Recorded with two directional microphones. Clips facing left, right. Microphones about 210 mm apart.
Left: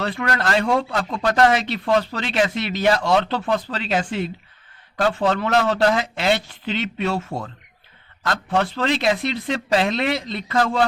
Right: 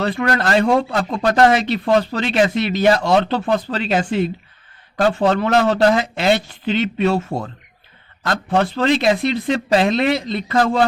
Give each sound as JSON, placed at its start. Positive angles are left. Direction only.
{"t": 0.2, "sound": "a man's voice", "side_deg": -40}